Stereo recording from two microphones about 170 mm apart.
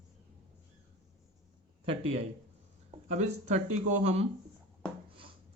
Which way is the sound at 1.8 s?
35° right (ahead or behind).